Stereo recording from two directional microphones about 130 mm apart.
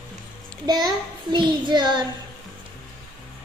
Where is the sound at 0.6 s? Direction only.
35° right (ahead or behind).